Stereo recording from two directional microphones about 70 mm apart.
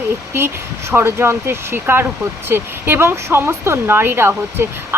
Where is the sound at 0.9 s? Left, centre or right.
Right.